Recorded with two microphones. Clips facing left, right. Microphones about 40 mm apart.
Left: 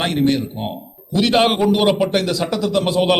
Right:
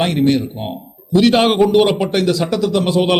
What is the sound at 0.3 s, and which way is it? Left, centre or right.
A man's voice, centre.